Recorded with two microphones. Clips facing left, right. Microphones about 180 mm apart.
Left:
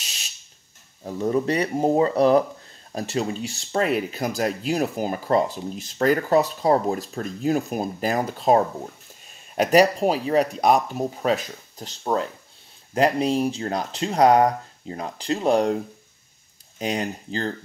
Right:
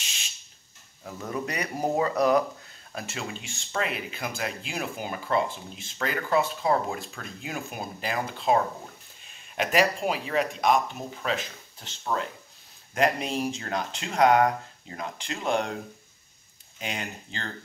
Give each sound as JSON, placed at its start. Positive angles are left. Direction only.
{"t": 0.0, "sound": "fire alarm", "side_deg": 40}
{"t": 1.0, "sound": "speech", "side_deg": 30}